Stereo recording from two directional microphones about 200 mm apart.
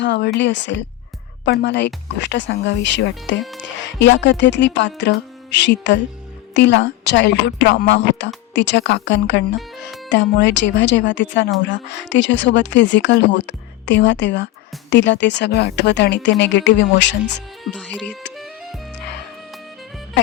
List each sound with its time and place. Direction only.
0.0 s speech: 60° left (ahead or behind)
17.9 s music: 5° left (ahead or behind)